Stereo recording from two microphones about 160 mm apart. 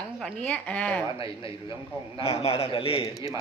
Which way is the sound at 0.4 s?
5° left (ahead or behind).